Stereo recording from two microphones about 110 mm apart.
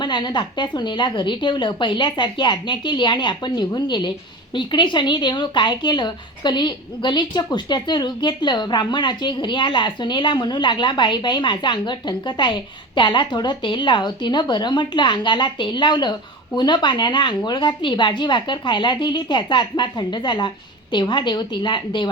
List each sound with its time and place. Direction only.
0.0 s speech: 45° left (ahead or behind)